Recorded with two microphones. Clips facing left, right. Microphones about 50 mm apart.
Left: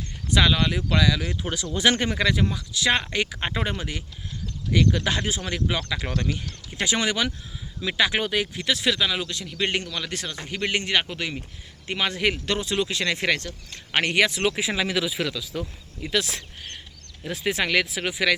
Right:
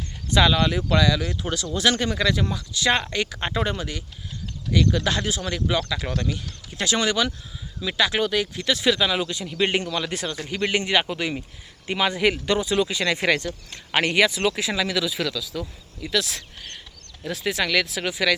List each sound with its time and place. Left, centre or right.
0.3 s speech: centre
14.4 s speech: centre
15.4 s speech: left
17.9 s speech: centre